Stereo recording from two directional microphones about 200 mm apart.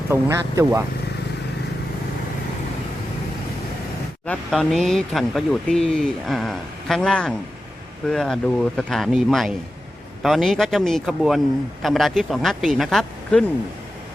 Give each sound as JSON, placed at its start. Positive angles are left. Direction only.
{"t": 0.1, "sound": "speech", "side_deg": -15}
{"t": 4.3, "sound": "speech", "side_deg": 0}